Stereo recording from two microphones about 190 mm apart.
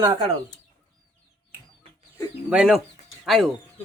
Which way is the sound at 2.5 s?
5° right (ahead or behind).